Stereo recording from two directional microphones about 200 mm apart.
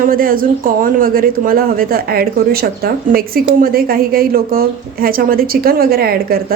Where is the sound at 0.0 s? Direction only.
45° right (ahead or behind).